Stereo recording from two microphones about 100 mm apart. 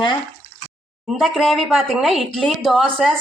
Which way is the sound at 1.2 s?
Centre (ahead or behind).